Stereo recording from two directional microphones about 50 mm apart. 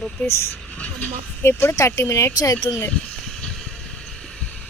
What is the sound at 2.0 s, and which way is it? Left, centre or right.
Speech, left.